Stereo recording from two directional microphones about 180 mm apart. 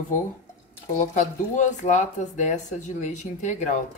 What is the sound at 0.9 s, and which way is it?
Speech, 45° left (ahead or behind).